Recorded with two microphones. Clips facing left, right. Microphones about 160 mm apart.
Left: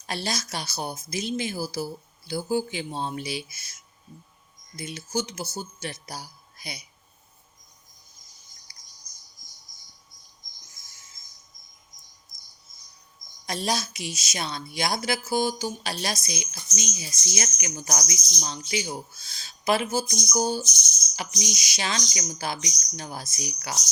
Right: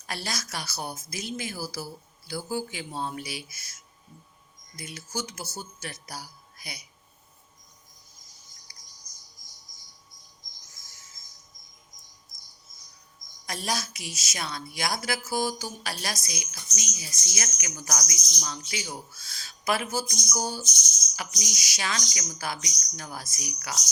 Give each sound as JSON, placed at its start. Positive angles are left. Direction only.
{"t": 0.1, "sound": "a woman's voice", "side_deg": 25}
{"t": 4.8, "sound": "a woman's voice", "side_deg": 25}
{"t": 13.4, "sound": "a woman's voice", "side_deg": 25}